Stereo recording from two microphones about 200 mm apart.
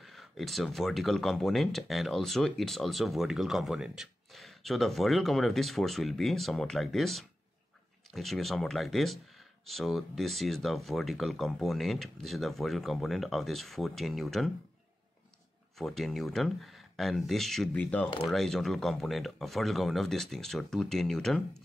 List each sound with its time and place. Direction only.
0.0 s speech: centre (ahead or behind)
15.8 s speech: centre (ahead or behind)